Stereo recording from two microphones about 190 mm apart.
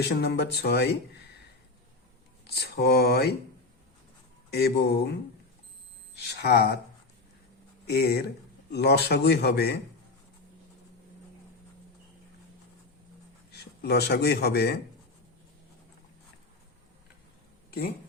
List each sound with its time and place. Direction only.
0.0 s a man's voice: 60° left (ahead or behind)
2.5 s a man's voice: 55° left (ahead or behind)
4.5 s a man's voice: 55° left (ahead or behind)
6.4 s a man's voice: 60° left (ahead or behind)
7.9 s a man's voice: 55° left (ahead or behind)
13.5 s speech: 60° left (ahead or behind)